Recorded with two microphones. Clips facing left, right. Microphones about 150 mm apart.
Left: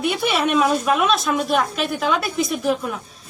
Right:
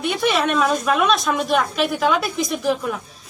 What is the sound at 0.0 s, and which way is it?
A woman's voice, 5° left (ahead or behind).